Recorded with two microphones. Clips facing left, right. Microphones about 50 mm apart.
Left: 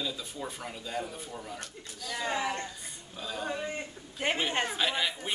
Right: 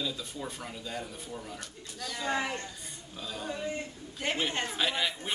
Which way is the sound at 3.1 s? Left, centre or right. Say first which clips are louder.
Left 2 dB; centre.